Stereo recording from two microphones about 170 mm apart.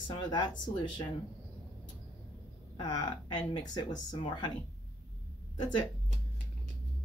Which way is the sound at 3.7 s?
25° left (ahead or behind).